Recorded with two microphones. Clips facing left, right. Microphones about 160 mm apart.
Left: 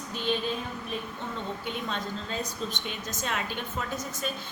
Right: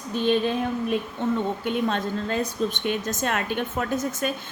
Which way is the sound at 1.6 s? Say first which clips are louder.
Right 9 dB; 55° right (ahead or behind).